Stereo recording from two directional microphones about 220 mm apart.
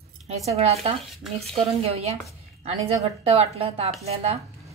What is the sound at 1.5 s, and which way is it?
A woman's voice, 25° right (ahead or behind).